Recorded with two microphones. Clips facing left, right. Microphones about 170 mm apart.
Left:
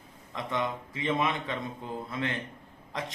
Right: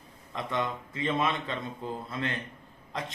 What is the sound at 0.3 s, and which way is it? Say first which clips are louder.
A man's voice: even; 20° left (ahead or behind).